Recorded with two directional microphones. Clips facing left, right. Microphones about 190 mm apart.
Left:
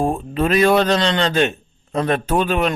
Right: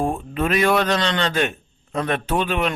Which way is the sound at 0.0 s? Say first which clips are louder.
Left 3 dB; 30° left (ahead or behind).